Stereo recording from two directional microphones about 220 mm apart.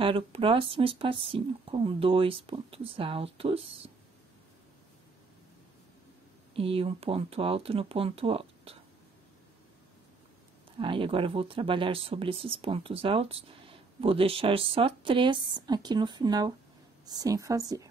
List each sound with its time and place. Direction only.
0.0 s speech: 25° right (ahead or behind)
6.5 s speech: 25° right (ahead or behind)
10.8 s a woman's voice: 25° right (ahead or behind)